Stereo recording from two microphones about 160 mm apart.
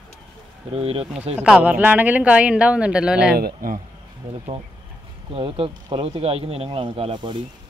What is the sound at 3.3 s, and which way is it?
Speech, 70° right (ahead or behind).